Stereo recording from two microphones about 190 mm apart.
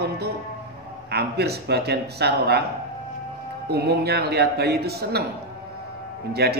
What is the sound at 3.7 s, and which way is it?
Speech, 55° right (ahead or behind).